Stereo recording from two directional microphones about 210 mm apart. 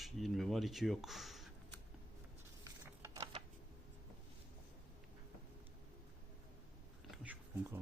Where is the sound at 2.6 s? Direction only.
15° right (ahead or behind).